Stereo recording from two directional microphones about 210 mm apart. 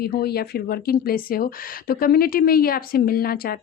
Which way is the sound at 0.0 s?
50° left (ahead or behind).